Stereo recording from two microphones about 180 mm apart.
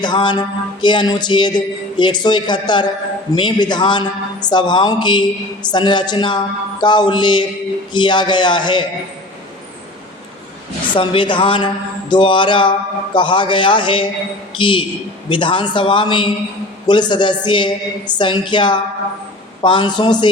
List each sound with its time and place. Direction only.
0.0 s music: 25° left (ahead or behind)
10.9 s music: 25° left (ahead or behind)